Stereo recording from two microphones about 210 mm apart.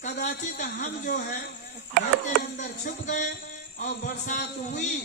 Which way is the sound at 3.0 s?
35° left (ahead or behind).